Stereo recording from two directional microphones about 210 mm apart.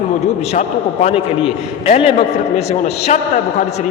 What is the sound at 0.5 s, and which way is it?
A man's voice, 30° left (ahead or behind).